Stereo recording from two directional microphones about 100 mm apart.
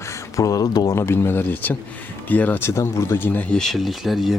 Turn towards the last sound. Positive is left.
turn(degrees=0)  # may be behind; listen again after turning